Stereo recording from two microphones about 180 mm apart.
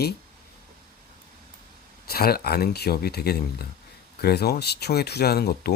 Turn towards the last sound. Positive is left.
turn(degrees=60)  # may be behind; listen again after turning